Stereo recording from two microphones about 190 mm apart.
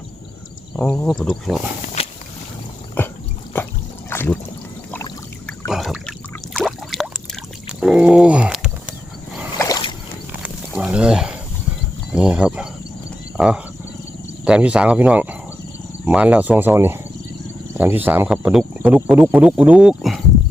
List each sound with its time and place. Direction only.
0.8 s speech: centre (ahead or behind)
2.0 s boat: 35° left (ahead or behind)
3.0 s dog: 10° left (ahead or behind)
4.1 s a sound: 10° left (ahead or behind)
5.5 s a sound: centre (ahead or behind)
9.6 s boat: 20° left (ahead or behind)
10.8 s a sound: 5° right (ahead or behind)
13.3 s wild animals: 5° right (ahead or behind)
14.4 s speech: 5° right (ahead or behind)